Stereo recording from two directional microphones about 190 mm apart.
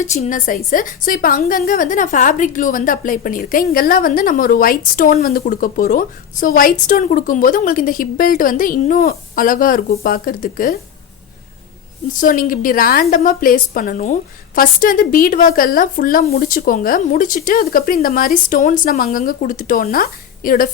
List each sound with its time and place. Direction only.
0.0 s a woman's voice: 40° left (ahead or behind)
12.2 s a woman's voice: 45° left (ahead or behind)